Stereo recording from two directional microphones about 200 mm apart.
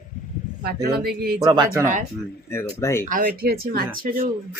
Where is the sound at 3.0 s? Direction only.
40° right (ahead or behind).